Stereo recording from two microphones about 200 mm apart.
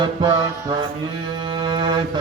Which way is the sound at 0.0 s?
20° right (ahead or behind).